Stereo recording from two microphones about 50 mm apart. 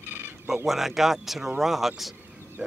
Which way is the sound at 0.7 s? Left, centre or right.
Centre.